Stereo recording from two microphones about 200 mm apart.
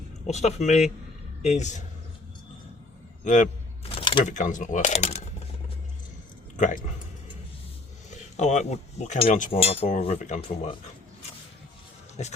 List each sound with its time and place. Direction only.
0.3 s a man's voice: 35° left (ahead or behind)
3.2 s a sound: 40° left (ahead or behind)
4.4 s speech: 40° left (ahead or behind)
6.6 s speech: 40° left (ahead or behind)
8.1 s speech: 35° left (ahead or behind)
12.2 s speech: 35° left (ahead or behind)